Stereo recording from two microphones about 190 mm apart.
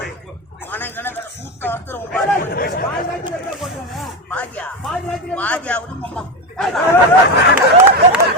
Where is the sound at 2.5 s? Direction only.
55° left (ahead or behind).